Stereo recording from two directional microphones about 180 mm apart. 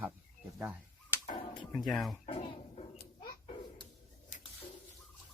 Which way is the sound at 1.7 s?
Centre (ahead or behind).